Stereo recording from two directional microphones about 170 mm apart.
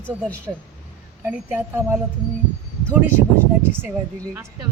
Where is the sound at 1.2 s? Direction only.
10° right (ahead or behind).